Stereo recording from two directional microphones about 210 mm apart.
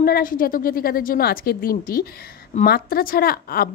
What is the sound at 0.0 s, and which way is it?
A woman's voice, 40° left (ahead or behind).